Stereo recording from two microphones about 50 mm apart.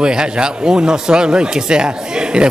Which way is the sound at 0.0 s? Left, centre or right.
Centre.